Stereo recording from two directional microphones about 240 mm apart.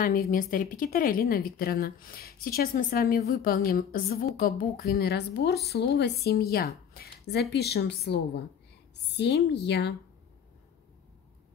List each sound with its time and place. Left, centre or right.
0.0 s speech: left